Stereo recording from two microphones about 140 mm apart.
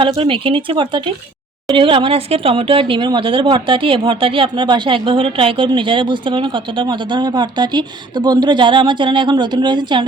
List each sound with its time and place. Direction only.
0.2 s speech: 40° right (ahead or behind)